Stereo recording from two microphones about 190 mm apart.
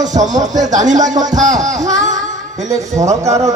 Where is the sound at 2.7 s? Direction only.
15° right (ahead or behind).